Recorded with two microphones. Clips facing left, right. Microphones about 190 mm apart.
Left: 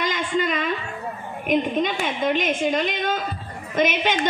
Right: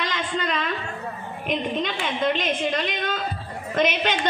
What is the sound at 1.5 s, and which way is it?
A woman's voice, 50° left (ahead or behind).